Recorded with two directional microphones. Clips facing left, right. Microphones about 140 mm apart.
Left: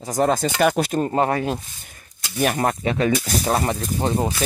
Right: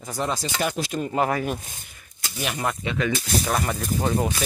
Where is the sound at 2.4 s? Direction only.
50° left (ahead or behind).